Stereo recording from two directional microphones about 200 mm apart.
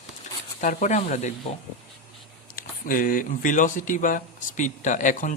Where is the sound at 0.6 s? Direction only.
40° left (ahead or behind).